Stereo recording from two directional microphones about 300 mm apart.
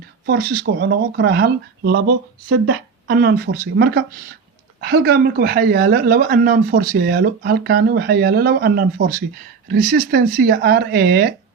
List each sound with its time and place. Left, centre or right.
0.3 s speech: right